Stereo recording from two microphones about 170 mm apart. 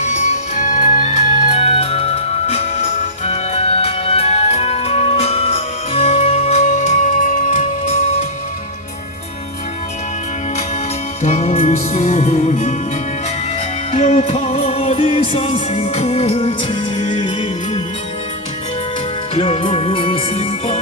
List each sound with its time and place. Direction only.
0.0 s music: 45° left (ahead or behind)
11.2 s music: 40° left (ahead or behind)
14.0 s music: 35° left (ahead or behind)
19.3 s music: 35° left (ahead or behind)